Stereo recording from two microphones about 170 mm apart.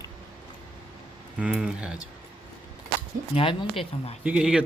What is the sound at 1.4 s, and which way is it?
Speech, 5° right (ahead or behind).